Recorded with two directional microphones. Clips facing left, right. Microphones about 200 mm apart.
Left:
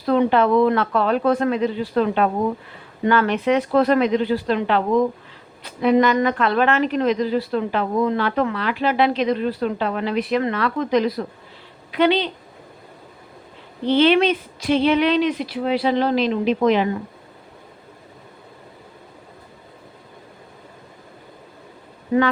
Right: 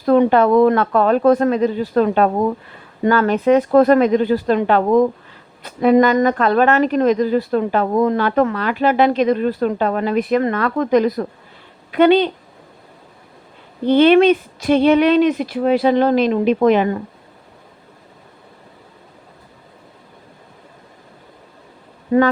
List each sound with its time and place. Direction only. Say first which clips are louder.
0.0 s a woman's voice: right 4 dB; 45° right (ahead or behind)
13.9 s a woman's voice: right 5 dB; 50° right (ahead or behind)
22.1 s a woman's voice: right 4 dB; 50° right (ahead or behind)